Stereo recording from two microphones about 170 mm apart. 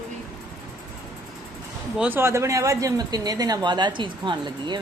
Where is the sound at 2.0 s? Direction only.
10° right (ahead or behind).